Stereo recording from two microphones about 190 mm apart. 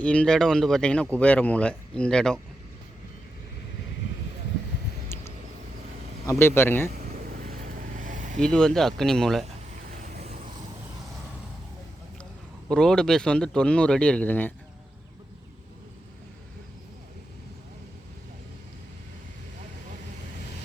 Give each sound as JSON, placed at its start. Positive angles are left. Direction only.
{"t": 0.0, "sound": "speech", "side_deg": 5}
{"t": 5.0, "sound": "a sound", "side_deg": 15}
{"t": 6.2, "sound": "speech", "side_deg": 15}
{"t": 7.0, "sound": "vehicle", "side_deg": -40}
{"t": 8.4, "sound": "speech", "side_deg": 5}
{"t": 9.9, "sound": "vehicle", "side_deg": -40}
{"t": 12.6, "sound": "speech", "side_deg": 5}